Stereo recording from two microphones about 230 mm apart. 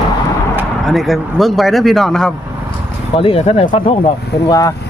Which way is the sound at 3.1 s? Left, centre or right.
Left.